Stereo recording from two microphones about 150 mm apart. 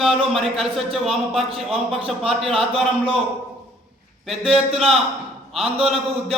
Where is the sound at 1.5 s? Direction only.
Centre (ahead or behind).